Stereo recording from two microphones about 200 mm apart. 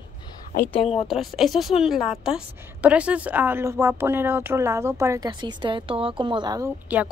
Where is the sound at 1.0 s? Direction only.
Centre (ahead or behind); by 6.7 s 20° right (ahead or behind).